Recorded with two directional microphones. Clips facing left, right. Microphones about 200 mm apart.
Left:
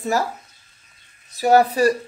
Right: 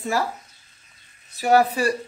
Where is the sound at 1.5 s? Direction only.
40° left (ahead or behind).